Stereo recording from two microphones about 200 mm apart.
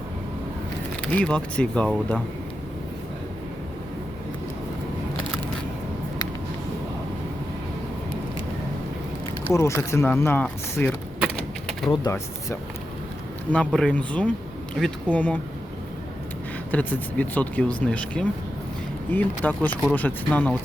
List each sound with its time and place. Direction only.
1.1 s speech: 5° left (ahead or behind)
9.5 s speech: 15° left (ahead or behind)
11.9 s speech: 15° left (ahead or behind)
13.7 s speech: 5° left (ahead or behind)
16.7 s speech: 5° left (ahead or behind)